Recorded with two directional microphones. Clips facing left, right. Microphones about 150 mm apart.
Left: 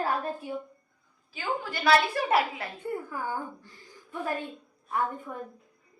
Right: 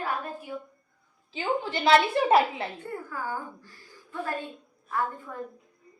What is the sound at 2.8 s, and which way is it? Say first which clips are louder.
Speech: left 2 dB; 20° left (ahead or behind).